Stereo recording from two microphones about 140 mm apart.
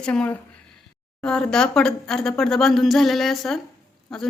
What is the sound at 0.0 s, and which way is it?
A woman's voice, 5° left (ahead or behind).